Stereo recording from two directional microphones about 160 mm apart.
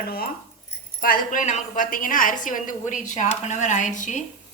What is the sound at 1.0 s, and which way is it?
A woman's voice, 60° left (ahead or behind).